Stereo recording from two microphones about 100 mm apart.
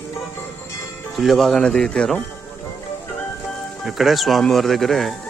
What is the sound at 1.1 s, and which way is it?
Speech, centre (ahead or behind).